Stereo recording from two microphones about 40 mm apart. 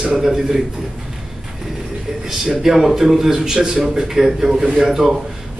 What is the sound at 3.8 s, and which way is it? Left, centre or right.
A man's voice, centre.